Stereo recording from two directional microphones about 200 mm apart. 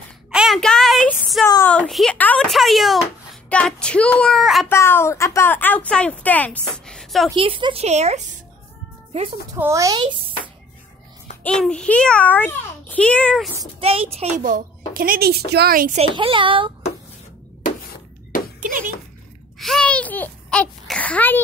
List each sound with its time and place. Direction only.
0.3 s a sound: centre (ahead or behind)
1.7 s speech: 5° left (ahead or behind)
4.6 s a woman's voice: 10° left (ahead or behind)
7.2 s speech: 25° right (ahead or behind)
9.5 s speech: 15° right (ahead or behind)
11.4 s a woman's voice: 5° left (ahead or behind)
13.6 s a child's voice: 30° right (ahead or behind); by 16.0 s 45° right (ahead or behind)
16.2 s speech: 25° right (ahead or behind)
19.6 s a sound: 5° left (ahead or behind)